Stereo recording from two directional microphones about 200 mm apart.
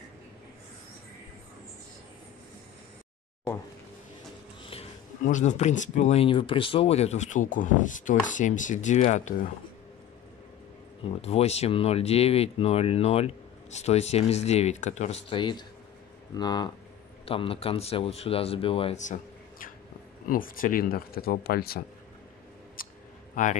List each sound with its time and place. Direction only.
5.2 s speech: 40° left (ahead or behind)
11.1 s speech: 30° left (ahead or behind)
20.2 s speech: 45° left (ahead or behind)
22.8 s a sound: 45° left (ahead or behind)
23.3 s a man's voice: 40° left (ahead or behind)